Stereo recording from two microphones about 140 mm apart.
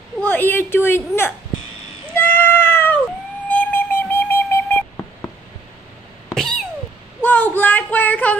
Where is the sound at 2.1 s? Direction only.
15° left (ahead or behind).